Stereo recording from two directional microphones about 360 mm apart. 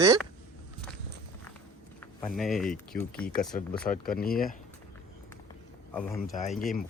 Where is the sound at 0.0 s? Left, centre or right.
Centre.